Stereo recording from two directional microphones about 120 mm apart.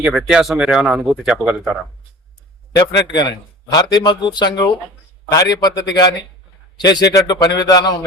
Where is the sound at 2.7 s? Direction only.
35° left (ahead or behind).